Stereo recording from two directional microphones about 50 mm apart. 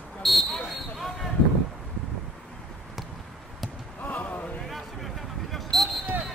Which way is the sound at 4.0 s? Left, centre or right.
Left.